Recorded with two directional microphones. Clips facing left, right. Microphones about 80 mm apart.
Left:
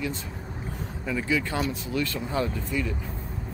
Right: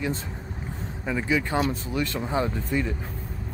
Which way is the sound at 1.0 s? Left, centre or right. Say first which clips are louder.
Right 2 dB; right.